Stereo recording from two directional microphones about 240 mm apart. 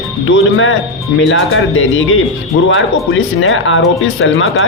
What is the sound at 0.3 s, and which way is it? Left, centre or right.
Speech, left.